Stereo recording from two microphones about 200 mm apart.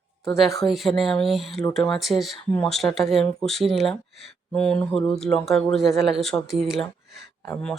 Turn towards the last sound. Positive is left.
turn(degrees=10)  # may be behind; listen again after turning